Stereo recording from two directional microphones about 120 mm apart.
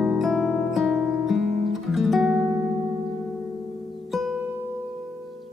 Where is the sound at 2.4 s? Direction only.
20° right (ahead or behind).